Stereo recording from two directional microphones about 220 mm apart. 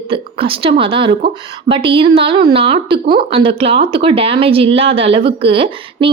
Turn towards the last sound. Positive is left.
turn(degrees=-25)  # may be behind; listen again after turning